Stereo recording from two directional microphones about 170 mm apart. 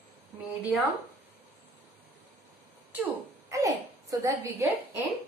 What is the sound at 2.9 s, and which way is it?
A woman's voice, 15° right (ahead or behind).